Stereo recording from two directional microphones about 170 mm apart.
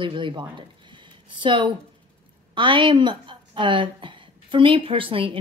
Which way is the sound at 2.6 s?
30° right (ahead or behind).